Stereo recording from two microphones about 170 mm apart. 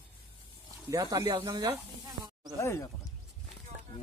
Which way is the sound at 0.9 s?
20° right (ahead or behind).